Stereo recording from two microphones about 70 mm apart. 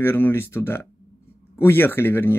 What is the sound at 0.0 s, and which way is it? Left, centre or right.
Speech, left.